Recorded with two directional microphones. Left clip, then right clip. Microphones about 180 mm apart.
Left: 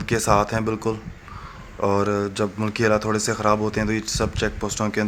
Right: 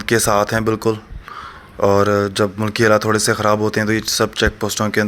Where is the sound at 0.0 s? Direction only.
20° right (ahead or behind).